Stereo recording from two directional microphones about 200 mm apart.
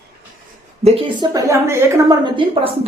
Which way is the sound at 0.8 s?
30° right (ahead or behind).